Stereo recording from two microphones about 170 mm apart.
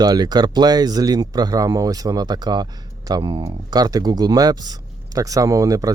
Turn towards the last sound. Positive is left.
turn(degrees=-20)  # may be behind; listen again after turning